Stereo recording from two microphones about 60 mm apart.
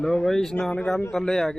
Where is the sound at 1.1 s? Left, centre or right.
Centre.